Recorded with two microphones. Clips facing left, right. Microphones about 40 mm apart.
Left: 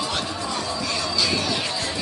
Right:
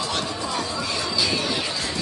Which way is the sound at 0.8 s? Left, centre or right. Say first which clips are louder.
Even; centre.